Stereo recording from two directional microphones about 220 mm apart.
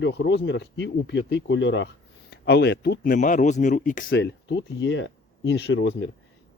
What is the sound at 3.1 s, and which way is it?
Speech, 35° left (ahead or behind).